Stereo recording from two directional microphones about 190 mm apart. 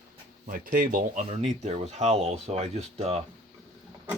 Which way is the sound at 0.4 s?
50° right (ahead or behind).